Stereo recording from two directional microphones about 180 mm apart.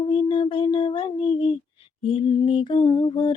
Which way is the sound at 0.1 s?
25° left (ahead or behind).